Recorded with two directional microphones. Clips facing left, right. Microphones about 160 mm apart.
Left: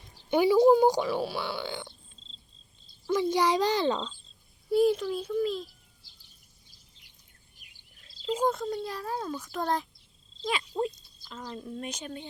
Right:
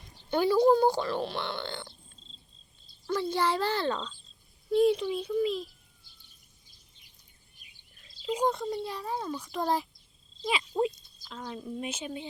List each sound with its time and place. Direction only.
0.3 s speech: 15° left (ahead or behind)
4.7 s a child's voice: 5° left (ahead or behind)
7.9 s a sound: 5° left (ahead or behind)
8.4 s a child's voice: centre (ahead or behind)
10.4 s a sound: 10° right (ahead or behind)
11.3 s a child's voice: 5° right (ahead or behind)